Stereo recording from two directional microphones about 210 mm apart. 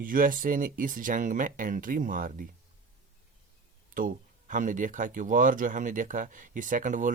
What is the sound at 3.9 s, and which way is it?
Speech, 40° right (ahead or behind).